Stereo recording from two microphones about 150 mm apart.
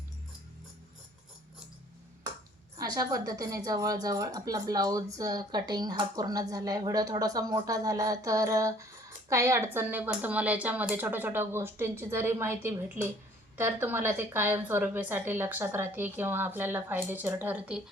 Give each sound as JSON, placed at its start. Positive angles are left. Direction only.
{"t": 2.7, "sound": "a woman's voice", "side_deg": -25}